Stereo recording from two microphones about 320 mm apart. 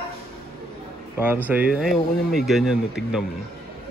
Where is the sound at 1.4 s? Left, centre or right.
Centre.